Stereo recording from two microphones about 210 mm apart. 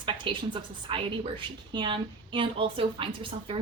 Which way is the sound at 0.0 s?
25° right (ahead or behind).